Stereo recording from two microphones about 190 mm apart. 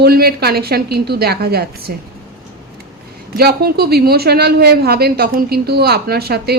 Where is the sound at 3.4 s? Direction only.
55° right (ahead or behind).